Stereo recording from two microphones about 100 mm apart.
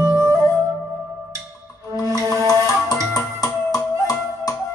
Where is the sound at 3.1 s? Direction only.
35° left (ahead or behind).